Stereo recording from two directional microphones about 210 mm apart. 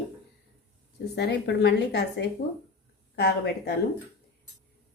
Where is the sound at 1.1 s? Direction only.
55° left (ahead or behind).